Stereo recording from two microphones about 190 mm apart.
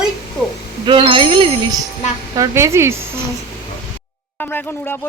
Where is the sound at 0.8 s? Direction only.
25° right (ahead or behind).